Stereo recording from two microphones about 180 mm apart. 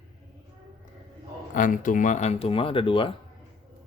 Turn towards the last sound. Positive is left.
turn(degrees=30)  # may be behind; listen again after turning